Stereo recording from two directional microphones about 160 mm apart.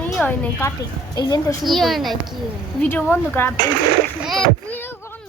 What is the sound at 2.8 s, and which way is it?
Speech, 10° left (ahead or behind).